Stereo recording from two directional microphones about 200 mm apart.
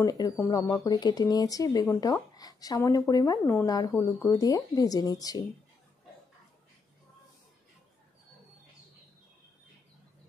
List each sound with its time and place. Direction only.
0.0 s speech: 15° left (ahead or behind)